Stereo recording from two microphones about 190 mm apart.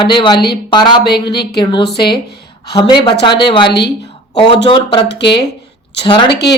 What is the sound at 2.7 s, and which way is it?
Speech, 25° left (ahead or behind).